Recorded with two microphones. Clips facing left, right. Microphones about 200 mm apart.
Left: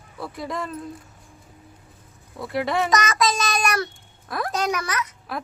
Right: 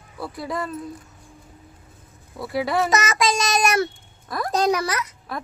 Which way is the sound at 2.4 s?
5° right (ahead or behind).